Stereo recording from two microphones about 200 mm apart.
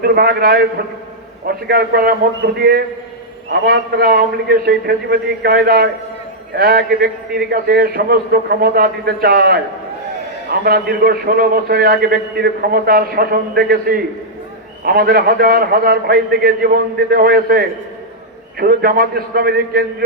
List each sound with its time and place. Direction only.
0.0 s a man's voice: 50° right (ahead or behind)